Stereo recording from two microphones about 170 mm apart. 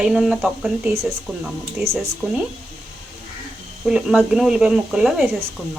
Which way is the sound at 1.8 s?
15° right (ahead or behind).